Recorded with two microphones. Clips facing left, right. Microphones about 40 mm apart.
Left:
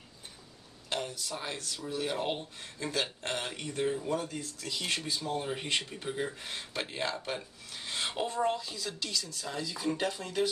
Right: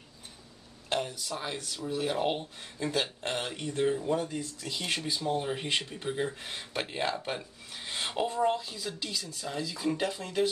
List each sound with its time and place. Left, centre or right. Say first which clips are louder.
0.8 s a sound: right 4 dB; centre
1.2 s speech: right 2 dB; centre
4.1 s speech: right 3 dB; right
5.2 s speech: right 3 dB; centre
7.7 s a sound: even; centre
8.1 s speech: right 3 dB; centre
9.5 s speech: right 2 dB; centre